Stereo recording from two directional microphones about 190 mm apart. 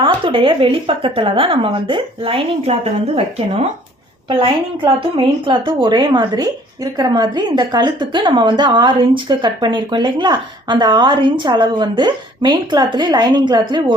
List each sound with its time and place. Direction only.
0.0 s a woman's voice: 25° right (ahead or behind)
4.3 s a woman's voice: 30° right (ahead or behind)